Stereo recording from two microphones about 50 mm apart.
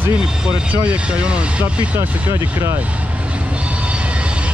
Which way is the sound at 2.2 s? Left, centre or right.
Right.